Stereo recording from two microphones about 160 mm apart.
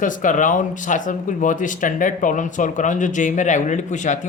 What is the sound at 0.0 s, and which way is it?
Speech, 55° left (ahead or behind).